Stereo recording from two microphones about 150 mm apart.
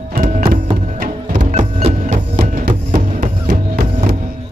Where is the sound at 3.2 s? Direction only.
60° right (ahead or behind).